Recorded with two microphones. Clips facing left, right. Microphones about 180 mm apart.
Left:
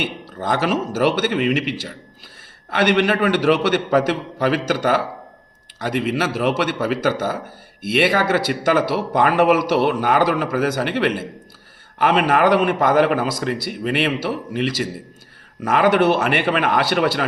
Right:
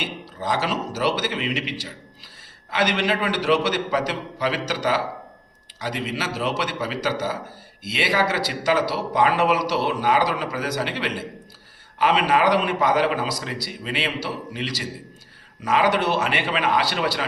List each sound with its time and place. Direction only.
0.0 s a man's voice: 55° left (ahead or behind)